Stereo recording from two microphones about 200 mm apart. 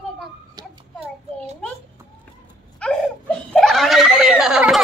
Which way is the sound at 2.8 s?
5° left (ahead or behind).